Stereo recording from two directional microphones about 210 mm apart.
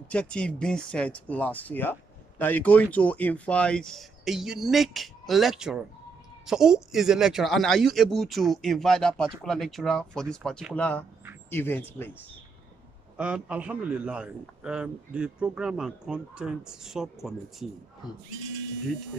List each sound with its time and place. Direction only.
0.1 s speech: 5° left (ahead or behind)
13.2 s speech: 5° right (ahead or behind)